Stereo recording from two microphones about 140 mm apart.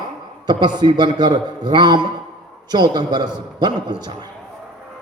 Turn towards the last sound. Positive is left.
turn(degrees=-30)  # may be behind; listen again after turning